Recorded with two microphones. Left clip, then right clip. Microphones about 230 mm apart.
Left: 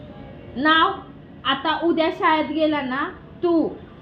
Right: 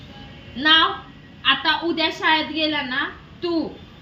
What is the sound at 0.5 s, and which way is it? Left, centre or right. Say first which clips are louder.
A woman's voice: right 1 dB; right.